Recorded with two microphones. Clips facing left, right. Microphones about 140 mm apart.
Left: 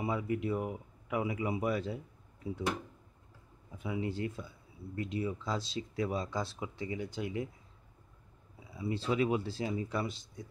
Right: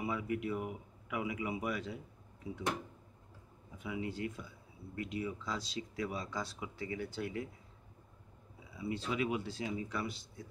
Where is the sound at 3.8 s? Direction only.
30° left (ahead or behind).